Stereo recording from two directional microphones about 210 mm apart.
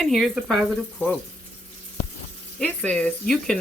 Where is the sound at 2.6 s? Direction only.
5° left (ahead or behind).